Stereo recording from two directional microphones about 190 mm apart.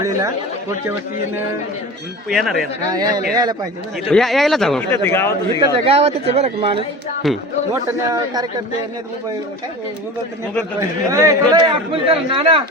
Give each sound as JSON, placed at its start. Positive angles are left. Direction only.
{"t": 0.0, "sound": "a man's voice", "side_deg": -15}
{"t": 2.3, "sound": "speech", "side_deg": 0}
{"t": 3.3, "sound": "a man's voice", "side_deg": -20}
{"t": 4.1, "sound": "speech", "side_deg": 0}
{"t": 4.9, "sound": "a man's voice", "side_deg": 10}
{"t": 5.5, "sound": "speech", "side_deg": -30}
{"t": 7.2, "sound": "speech", "side_deg": 0}
{"t": 7.7, "sound": "a man's voice", "side_deg": -20}
{"t": 10.8, "sound": "a man's voice", "side_deg": -15}
{"t": 12.0, "sound": "a man's voice", "side_deg": -30}